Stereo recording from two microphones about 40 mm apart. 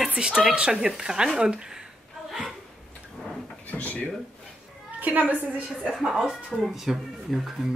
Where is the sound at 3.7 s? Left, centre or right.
Left.